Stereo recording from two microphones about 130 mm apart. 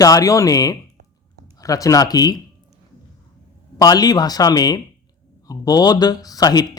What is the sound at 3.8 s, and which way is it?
Speech, 30° left (ahead or behind).